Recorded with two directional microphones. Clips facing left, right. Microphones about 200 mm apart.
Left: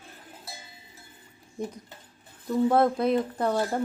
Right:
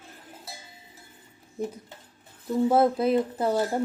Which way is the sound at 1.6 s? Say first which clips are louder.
Right 2 dB; 5° right (ahead or behind).